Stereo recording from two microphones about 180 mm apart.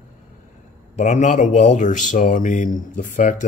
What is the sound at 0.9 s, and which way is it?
Speech, 40° left (ahead or behind).